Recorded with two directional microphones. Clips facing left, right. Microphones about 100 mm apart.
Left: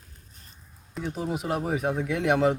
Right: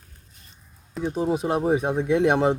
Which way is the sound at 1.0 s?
25° right (ahead or behind).